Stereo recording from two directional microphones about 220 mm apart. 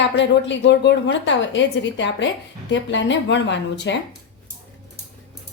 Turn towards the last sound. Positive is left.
turn(degrees=55)  # may be behind; listen again after turning